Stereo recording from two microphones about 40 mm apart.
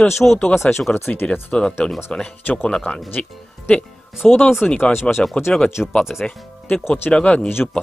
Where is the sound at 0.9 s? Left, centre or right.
Left.